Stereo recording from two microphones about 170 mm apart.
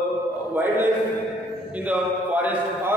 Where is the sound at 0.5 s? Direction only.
10° right (ahead or behind).